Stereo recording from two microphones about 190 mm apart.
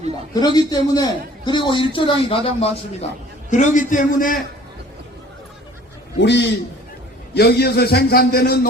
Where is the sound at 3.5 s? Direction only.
40° left (ahead or behind).